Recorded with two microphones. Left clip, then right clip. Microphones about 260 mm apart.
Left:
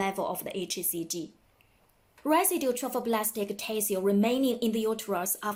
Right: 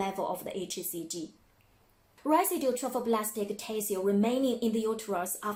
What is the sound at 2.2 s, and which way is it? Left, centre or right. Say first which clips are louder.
Speech: left 1 dB; left.